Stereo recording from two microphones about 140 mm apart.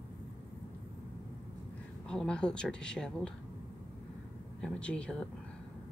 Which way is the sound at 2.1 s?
5° left (ahead or behind).